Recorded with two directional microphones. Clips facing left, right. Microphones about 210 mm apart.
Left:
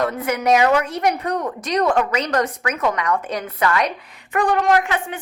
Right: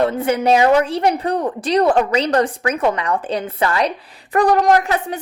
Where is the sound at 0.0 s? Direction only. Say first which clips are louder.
Right 4 dB; 30° right (ahead or behind).